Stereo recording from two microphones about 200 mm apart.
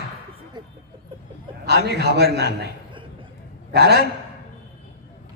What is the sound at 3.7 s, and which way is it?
Speech, 55° right (ahead or behind).